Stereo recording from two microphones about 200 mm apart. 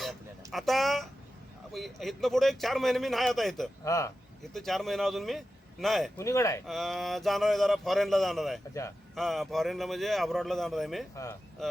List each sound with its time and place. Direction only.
0.0 s a sound: centre (ahead or behind)
1.7 s a man's voice: centre (ahead or behind)
3.8 s speech: 15° left (ahead or behind)
4.5 s a man's voice: centre (ahead or behind)
6.1 s speech: 15° left (ahead or behind)
6.7 s a man's voice: centre (ahead or behind)
11.1 s speech: 15° left (ahead or behind)
11.6 s speech: centre (ahead or behind)